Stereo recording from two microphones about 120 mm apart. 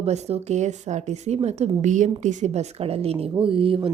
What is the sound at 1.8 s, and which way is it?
Speech, 90° right.